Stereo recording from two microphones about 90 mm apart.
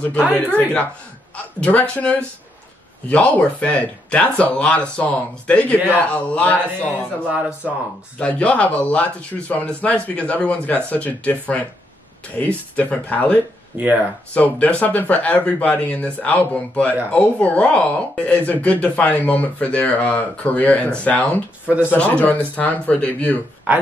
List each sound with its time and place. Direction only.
0.3 s speech: 15° left (ahead or behind)
7.2 s speech: 15° right (ahead or behind)
8.2 s speech: 15° left (ahead or behind)
13.7 s speech: 15° right (ahead or behind)
14.3 s speech: 15° left (ahead or behind)
21.6 s speech: 15° right (ahead or behind)
21.9 s speech: 15° left (ahead or behind)